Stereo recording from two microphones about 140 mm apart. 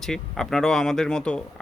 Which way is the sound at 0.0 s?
5° left (ahead or behind).